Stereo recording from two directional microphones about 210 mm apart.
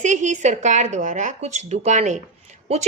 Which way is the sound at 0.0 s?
35° right (ahead or behind).